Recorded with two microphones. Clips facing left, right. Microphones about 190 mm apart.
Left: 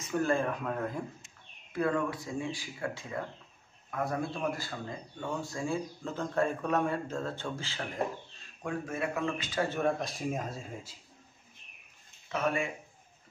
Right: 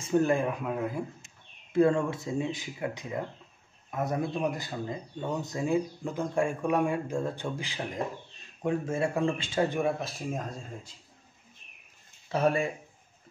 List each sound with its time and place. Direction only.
0.0 s speech: 20° right (ahead or behind)
1.7 s speech: 25° right (ahead or behind)
8.6 s speech: 25° right (ahead or behind)
9.7 s speech: 10° right (ahead or behind); by 11.0 s 5° left (ahead or behind)
12.3 s speech: 35° right (ahead or behind)